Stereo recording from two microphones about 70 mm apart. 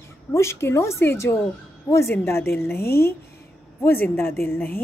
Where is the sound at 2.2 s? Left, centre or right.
Left.